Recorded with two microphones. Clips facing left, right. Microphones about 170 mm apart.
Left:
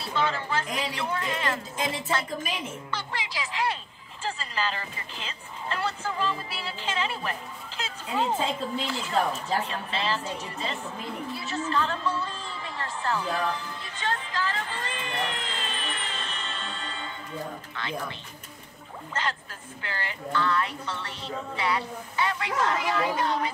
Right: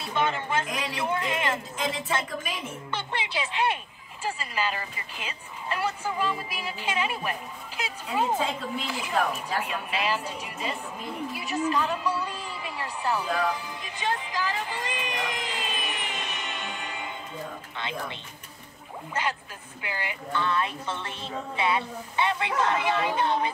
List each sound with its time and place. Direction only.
0.0 s a woman's voice: 20° right (ahead or behind)
2.9 s speech: 25° right (ahead or behind)
11.3 s a sound: 15° right (ahead or behind)
17.7 s a woman's voice: 20° right (ahead or behind)
19.8 s a woman's voice: 10° right (ahead or behind)